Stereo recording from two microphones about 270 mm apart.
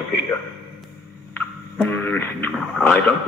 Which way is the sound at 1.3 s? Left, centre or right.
Centre.